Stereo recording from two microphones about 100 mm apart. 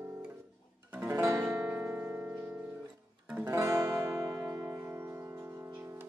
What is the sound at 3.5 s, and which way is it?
Music, 30° right (ahead or behind).